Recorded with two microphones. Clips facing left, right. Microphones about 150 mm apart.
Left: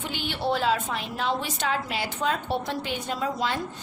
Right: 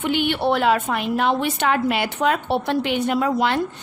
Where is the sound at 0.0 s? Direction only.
65° right (ahead or behind).